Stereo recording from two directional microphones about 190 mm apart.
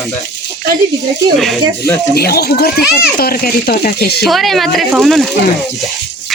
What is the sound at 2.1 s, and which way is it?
Speech, 55° left (ahead or behind).